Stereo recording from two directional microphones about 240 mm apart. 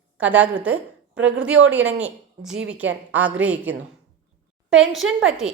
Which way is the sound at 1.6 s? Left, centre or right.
Centre.